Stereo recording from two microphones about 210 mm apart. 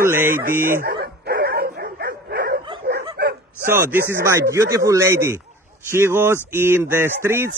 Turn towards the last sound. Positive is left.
turn(degrees=-10)  # may be behind; listen again after turning